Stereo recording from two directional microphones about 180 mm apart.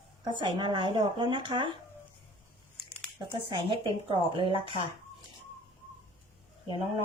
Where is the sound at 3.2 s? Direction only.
25° right (ahead or behind).